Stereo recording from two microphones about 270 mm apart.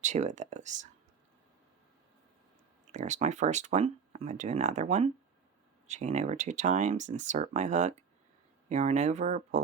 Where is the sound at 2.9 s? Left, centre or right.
Right.